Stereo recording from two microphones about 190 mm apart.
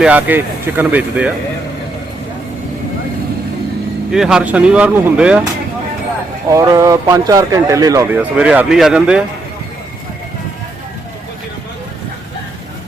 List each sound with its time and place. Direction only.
0.0 s speech: 10° right (ahead or behind)
4.1 s speech: 5° right (ahead or behind)
6.5 s speech: 15° right (ahead or behind)